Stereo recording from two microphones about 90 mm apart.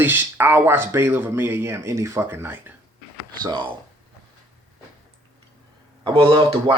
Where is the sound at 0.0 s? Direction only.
20° right (ahead or behind).